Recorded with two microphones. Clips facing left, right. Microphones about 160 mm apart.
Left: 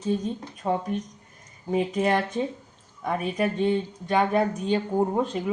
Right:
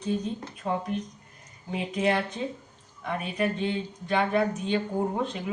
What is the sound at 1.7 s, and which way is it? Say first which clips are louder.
Speech: left 3 dB; 45° left (ahead or behind).